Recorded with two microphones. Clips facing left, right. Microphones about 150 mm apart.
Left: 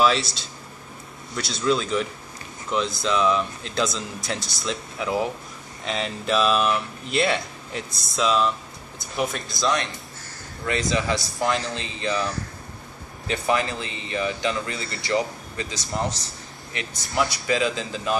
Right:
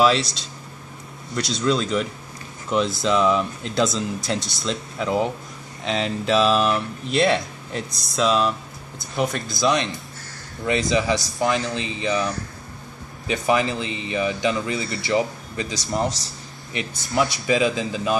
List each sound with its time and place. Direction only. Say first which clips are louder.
0.0 s speech: right 2 dB; centre (ahead or behind)
10.7 s speech: right 3 dB; 20° right (ahead or behind)
11.1 s speech: right 2 dB; centre (ahead or behind)
11.7 s speech: right 3 dB; 10° right (ahead or behind)
13.3 s speech: right 3 dB; 15° right (ahead or behind)
17.2 s speech: right 3 dB; 20° right (ahead or behind)